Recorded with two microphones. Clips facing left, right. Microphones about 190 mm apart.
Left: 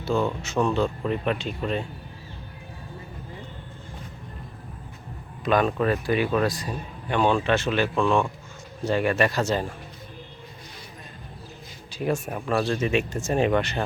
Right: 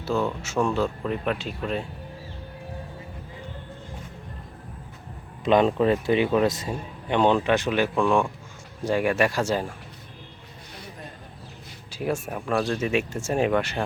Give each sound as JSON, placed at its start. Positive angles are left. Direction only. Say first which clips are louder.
{"t": 0.0, "sound": "speech", "louder": "left 1 dB", "side_deg": 0}
{"t": 5.5, "sound": "speech", "louder": "right 3 dB", "side_deg": -20}
{"t": 11.9, "sound": "speech", "louder": "left 1 dB", "side_deg": -5}